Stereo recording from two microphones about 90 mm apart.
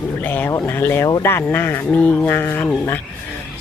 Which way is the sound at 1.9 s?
15° left (ahead or behind).